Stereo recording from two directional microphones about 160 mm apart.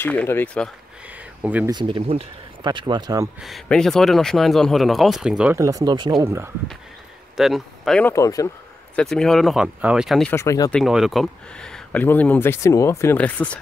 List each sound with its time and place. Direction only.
0.0 s speech: 10° left (ahead or behind)
1.4 s speech: 10° right (ahead or behind)
1.7 s speech: 30° right (ahead or behind)
3.3 s speech: centre (ahead or behind)
5.6 s speech: 20° right (ahead or behind)
6.2 s speech: 15° right (ahead or behind)
7.3 s speech: centre (ahead or behind)
8.0 s speech: 20° left (ahead or behind)
8.9 s speech: 5° left (ahead or behind)
10.3 s speech: 20° left (ahead or behind)
10.7 s speech: centre (ahead or behind)